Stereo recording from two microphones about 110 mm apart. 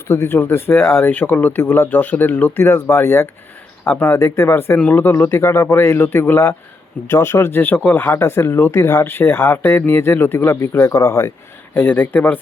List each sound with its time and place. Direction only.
0.1 s speech: 20° left (ahead or behind)
4.2 s speech: 25° left (ahead or behind)
11.7 s speech: 15° left (ahead or behind)